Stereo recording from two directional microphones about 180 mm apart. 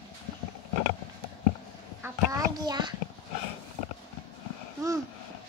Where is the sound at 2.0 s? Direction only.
20° right (ahead or behind).